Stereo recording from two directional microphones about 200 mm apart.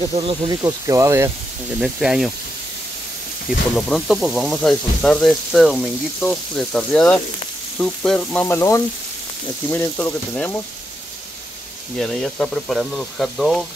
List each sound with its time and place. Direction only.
0.1 s speech: 25° right (ahead or behind)
1.8 s speech: 5° right (ahead or behind)
3.4 s speech: centre (ahead or behind)
7.8 s frying: 5° left (ahead or behind)
12.0 s speech: 5° left (ahead or behind)